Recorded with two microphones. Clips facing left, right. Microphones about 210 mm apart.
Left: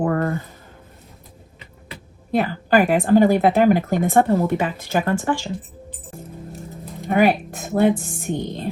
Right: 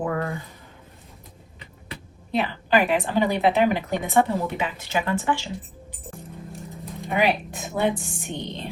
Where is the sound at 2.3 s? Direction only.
50° left (ahead or behind).